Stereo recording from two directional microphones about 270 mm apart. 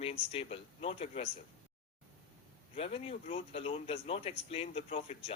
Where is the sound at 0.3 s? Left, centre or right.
Left.